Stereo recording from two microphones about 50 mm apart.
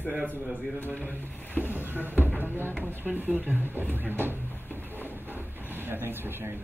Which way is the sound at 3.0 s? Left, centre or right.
Right.